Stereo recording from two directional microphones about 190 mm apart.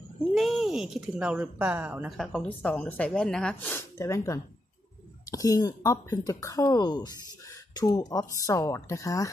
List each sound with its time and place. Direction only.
0.3 s speech: centre (ahead or behind); by 9.3 s 15° left (ahead or behind)